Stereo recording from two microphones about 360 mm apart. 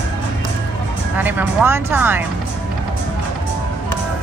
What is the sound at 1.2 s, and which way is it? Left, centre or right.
Music, centre.